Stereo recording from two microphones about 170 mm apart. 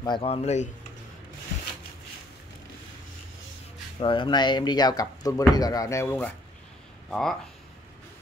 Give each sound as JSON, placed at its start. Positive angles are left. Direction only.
{"t": 0.0, "sound": "speech", "side_deg": 30}
{"t": 4.0, "sound": "speech", "side_deg": 30}